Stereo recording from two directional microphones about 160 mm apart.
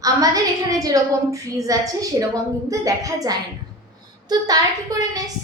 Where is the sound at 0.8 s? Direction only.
20° right (ahead or behind).